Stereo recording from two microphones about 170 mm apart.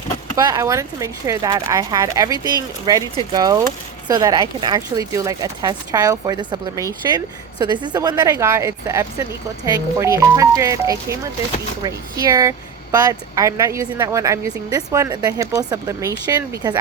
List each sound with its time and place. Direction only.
0.3 s speech: 20° right (ahead or behind)